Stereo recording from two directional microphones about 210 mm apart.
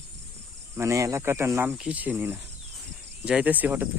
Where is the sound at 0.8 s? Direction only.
15° right (ahead or behind).